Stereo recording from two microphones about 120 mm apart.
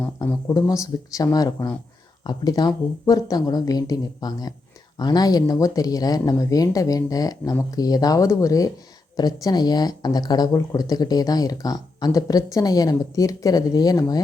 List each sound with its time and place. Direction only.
0.2 s speech: 30° left (ahead or behind)